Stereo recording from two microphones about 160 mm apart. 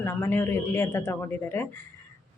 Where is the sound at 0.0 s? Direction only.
15° left (ahead or behind).